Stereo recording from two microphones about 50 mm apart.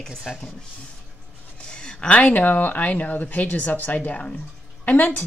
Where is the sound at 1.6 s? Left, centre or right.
Centre.